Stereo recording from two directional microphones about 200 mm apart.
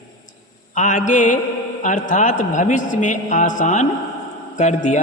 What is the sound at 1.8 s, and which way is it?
A man's voice, 40° left (ahead or behind).